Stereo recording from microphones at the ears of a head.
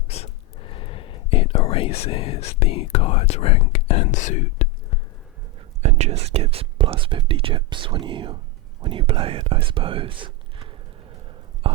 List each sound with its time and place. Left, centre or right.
0.1 s whispering: left
5.8 s speech: right
8.8 s whispering: right